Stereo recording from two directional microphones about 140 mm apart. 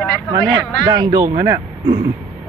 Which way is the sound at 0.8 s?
30° right (ahead or behind).